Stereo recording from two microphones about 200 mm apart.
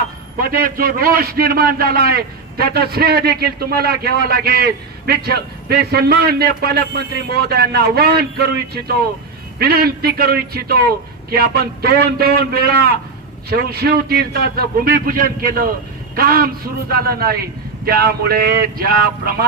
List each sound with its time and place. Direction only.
0.3 s a man's voice: 45° right (ahead or behind)